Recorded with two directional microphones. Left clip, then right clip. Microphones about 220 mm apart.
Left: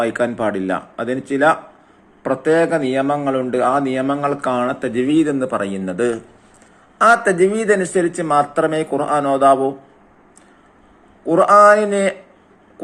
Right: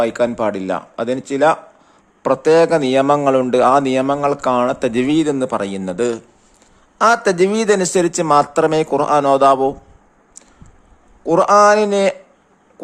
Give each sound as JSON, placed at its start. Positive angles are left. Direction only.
{"t": 0.0, "sound": "a man's voice", "side_deg": -35}
{"t": 7.3, "sound": "a man's voice", "side_deg": -40}
{"t": 11.3, "sound": "speech", "side_deg": -30}